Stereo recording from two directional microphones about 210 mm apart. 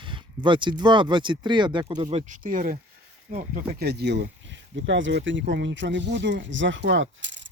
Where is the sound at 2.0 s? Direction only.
35° right (ahead or behind).